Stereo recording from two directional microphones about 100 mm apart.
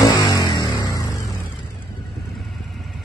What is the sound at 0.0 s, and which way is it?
Music, 40° left (ahead or behind).